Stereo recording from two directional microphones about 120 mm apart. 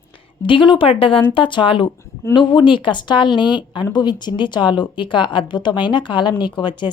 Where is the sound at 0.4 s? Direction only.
45° left (ahead or behind).